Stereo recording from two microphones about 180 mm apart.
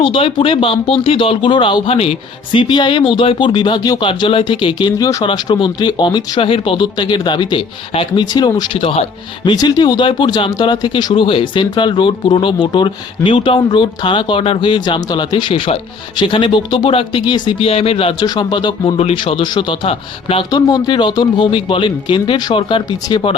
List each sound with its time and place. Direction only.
0.0 s speech: 30° left (ahead or behind)